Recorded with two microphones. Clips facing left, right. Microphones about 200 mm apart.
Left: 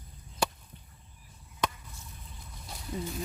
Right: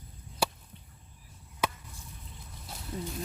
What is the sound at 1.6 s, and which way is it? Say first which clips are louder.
Chop: even; 10° right (ahead or behind).